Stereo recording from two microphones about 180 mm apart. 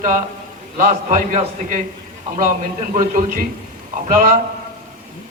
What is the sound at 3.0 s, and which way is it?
A man's voice, 45° right (ahead or behind).